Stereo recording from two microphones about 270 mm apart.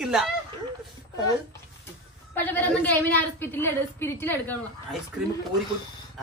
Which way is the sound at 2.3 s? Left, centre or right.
Centre.